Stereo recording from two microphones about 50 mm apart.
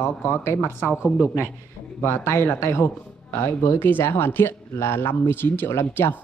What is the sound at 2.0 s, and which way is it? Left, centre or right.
A man's voice, left.